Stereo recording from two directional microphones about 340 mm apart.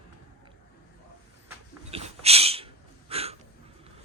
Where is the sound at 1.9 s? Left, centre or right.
Centre.